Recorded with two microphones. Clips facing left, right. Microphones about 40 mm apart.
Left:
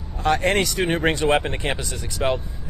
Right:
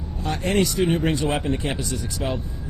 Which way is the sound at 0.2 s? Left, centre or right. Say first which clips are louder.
Left 3 dB; left.